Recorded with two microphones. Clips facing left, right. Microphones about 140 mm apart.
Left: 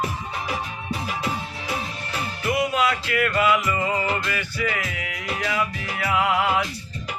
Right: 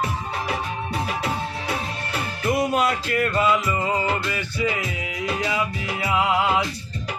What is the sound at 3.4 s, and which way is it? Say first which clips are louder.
Music: left 1 dB; 25° right (ahead or behind).